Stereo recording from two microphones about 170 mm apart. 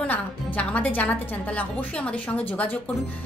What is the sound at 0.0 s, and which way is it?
A woman's voice, 10° left (ahead or behind).